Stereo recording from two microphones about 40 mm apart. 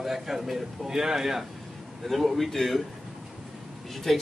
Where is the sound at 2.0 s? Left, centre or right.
Centre.